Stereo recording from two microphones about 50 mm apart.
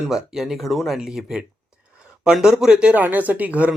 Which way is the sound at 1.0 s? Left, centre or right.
Centre.